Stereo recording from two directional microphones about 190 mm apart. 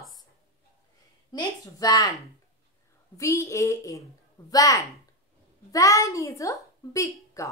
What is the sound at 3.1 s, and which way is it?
A woman's voice, 15° left (ahead or behind).